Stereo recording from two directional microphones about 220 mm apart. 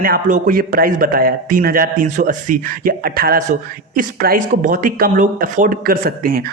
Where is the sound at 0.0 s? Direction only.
40° right (ahead or behind).